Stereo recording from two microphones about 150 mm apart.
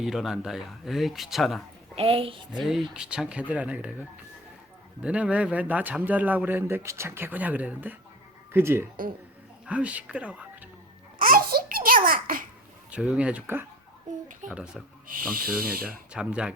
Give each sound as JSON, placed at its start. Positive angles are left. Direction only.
{"t": 0.0, "sound": "speech", "side_deg": 0}
{"t": 2.0, "sound": "a woman's voice", "side_deg": -40}
{"t": 2.6, "sound": "speech", "side_deg": -5}
{"t": 5.0, "sound": "speech", "side_deg": -10}
{"t": 11.2, "sound": "babbling", "side_deg": -70}
{"t": 12.9, "sound": "speech", "side_deg": -5}
{"t": 15.0, "sound": "speech", "side_deg": -70}
{"t": 16.1, "sound": "speech", "side_deg": -5}